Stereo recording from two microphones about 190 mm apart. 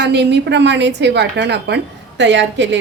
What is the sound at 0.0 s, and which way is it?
A woman's voice, 60° right (ahead or behind).